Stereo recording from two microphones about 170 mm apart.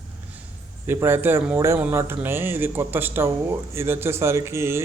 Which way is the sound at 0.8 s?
10° right (ahead or behind).